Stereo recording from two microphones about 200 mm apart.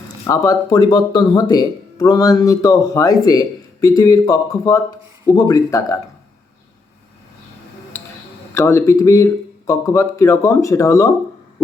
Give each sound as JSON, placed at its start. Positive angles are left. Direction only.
{"t": 0.3, "sound": "speech", "side_deg": 15}
{"t": 8.5, "sound": "speech", "side_deg": 15}